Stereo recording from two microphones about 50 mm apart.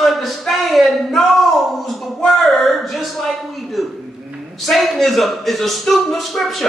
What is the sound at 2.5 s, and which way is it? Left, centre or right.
A woman's voice, centre.